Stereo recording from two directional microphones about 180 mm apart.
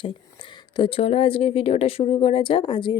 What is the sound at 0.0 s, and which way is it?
Speech, 30° left (ahead or behind).